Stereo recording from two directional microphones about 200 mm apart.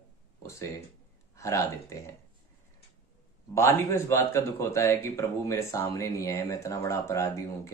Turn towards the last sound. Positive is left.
turn(degrees=15)  # may be behind; listen again after turning